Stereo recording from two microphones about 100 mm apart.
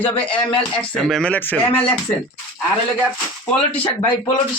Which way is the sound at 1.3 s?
15° left (ahead or behind).